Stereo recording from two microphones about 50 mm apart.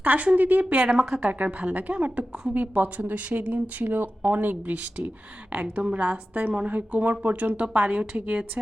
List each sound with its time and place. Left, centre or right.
0.0 s speech: right
0.9 s a woman's voice: centre
1.2 s speech: right